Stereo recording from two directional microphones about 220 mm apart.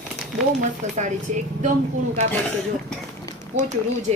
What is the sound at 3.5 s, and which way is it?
Speech, 35° right (ahead or behind).